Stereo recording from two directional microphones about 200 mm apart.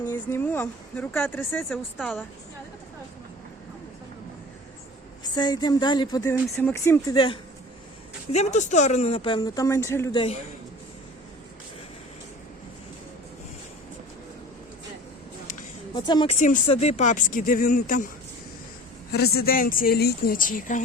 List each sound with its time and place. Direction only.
0.0 s speech: 10° left (ahead or behind)
5.2 s speech: 20° left (ahead or behind)
8.3 s speech: 35° left (ahead or behind); by 10.2 s 15° left (ahead or behind)
16.0 s speech: 20° left (ahead or behind); by 18.1 s 40° left (ahead or behind)
19.1 s speech: 50° left (ahead or behind)